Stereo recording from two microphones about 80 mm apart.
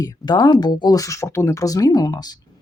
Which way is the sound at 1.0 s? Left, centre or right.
Left.